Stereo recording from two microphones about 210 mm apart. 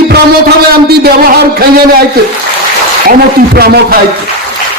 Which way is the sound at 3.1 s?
50° right (ahead or behind).